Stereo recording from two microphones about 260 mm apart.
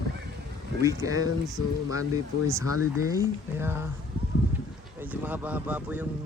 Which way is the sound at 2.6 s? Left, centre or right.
Left.